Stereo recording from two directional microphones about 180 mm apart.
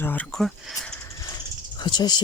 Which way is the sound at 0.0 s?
10° left (ahead or behind).